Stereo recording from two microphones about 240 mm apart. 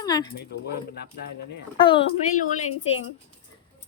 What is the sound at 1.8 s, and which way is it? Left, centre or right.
Speech, left.